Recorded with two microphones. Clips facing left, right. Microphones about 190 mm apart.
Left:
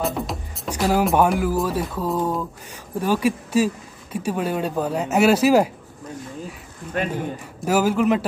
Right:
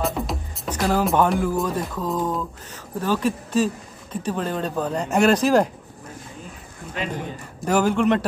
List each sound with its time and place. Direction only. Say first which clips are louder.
0.0 s music: even; centre (ahead or behind)
0.7 s speech: left 1 dB; 10° left (ahead or behind)
7.0 s speech: left 5 dB; 50° left (ahead or behind)
7.6 s speech: even; 5° left (ahead or behind)